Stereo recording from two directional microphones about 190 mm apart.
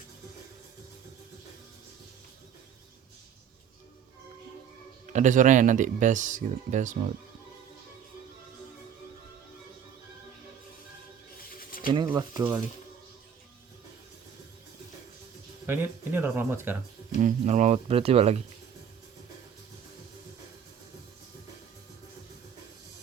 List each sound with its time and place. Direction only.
5.0 s speech: 40° right (ahead or behind)
12.0 s speech: 20° right (ahead or behind)
15.6 s speech: 10° right (ahead or behind)
17.2 s speech: 40° right (ahead or behind)